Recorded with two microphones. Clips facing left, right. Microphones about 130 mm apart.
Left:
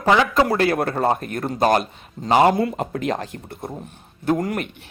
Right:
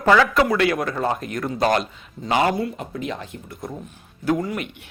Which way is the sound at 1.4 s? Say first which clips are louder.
Left 2 dB; 30° left (ahead or behind).